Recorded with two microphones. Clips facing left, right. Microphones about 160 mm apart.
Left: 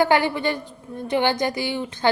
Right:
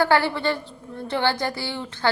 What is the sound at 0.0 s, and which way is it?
A woman's voice, 15° left (ahead or behind).